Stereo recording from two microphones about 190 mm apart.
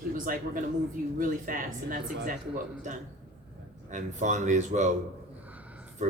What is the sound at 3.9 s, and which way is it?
Speech, 40° right (ahead or behind).